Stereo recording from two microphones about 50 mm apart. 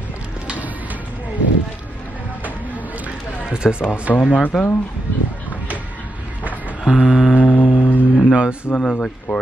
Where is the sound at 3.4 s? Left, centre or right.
Centre.